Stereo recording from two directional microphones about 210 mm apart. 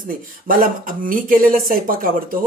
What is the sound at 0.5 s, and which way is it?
Speech, 40° right (ahead or behind).